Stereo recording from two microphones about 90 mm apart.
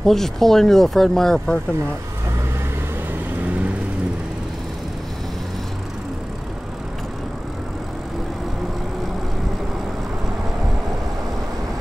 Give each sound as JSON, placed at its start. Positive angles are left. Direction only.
{"t": 0.0, "sound": "speech", "side_deg": 5}